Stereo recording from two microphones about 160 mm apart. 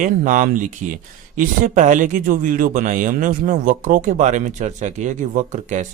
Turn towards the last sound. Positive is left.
turn(degrees=-50)  # may be behind; listen again after turning